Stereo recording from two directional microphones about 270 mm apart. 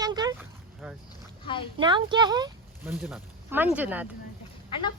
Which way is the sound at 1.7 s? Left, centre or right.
Centre.